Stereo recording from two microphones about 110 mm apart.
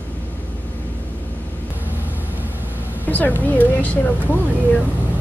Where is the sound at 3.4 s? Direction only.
15° left (ahead or behind).